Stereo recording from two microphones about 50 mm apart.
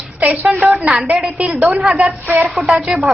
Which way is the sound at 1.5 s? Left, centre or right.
Right.